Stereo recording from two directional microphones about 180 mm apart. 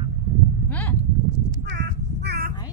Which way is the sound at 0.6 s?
10° left (ahead or behind).